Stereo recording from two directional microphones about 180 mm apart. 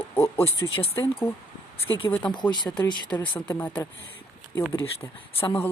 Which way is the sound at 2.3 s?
25° left (ahead or behind).